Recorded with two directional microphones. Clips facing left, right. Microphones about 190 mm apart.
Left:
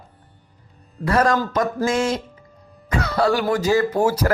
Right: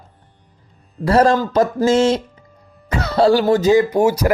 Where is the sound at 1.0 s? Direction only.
30° right (ahead or behind).